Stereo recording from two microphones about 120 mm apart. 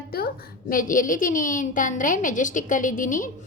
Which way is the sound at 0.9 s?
90° left.